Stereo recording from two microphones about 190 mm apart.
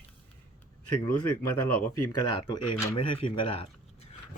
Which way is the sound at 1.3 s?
10° left (ahead or behind).